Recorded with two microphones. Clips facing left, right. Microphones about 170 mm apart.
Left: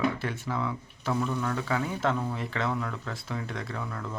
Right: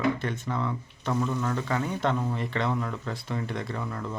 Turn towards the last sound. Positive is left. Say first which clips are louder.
# right 2 dB
turn(degrees=-5)  # may be behind; listen again after turning